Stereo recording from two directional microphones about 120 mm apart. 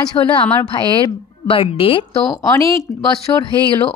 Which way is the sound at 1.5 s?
50° left (ahead or behind).